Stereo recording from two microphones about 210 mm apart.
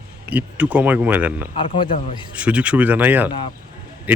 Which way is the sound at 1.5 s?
25° left (ahead or behind).